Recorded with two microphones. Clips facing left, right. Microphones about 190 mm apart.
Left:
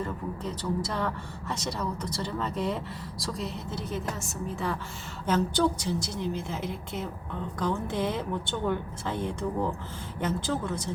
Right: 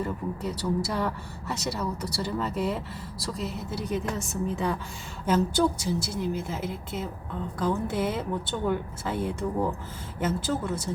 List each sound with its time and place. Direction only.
0.0 s speech: 10° right (ahead or behind)